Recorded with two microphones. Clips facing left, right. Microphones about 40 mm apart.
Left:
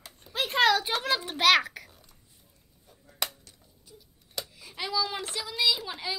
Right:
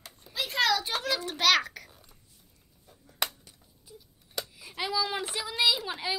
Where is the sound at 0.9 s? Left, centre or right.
Centre.